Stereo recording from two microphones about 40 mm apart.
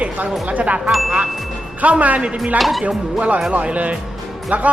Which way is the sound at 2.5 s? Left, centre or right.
Centre.